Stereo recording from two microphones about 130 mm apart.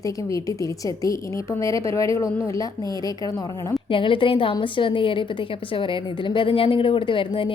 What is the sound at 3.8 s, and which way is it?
A woman's voice, 40° left (ahead or behind).